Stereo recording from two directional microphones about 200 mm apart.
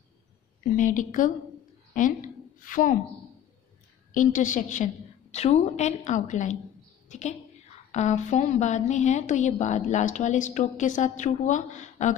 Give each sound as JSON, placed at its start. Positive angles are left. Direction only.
{"t": 0.7, "sound": "a woman's voice", "side_deg": 40}
{"t": 4.1, "sound": "a woman's voice", "side_deg": 40}